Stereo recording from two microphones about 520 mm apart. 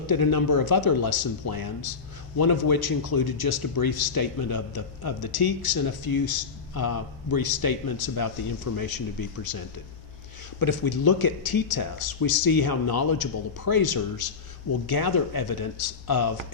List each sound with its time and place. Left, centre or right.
0.1 s a man's voice: left